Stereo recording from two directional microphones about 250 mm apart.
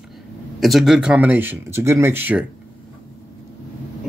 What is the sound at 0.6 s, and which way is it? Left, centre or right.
Speech, centre.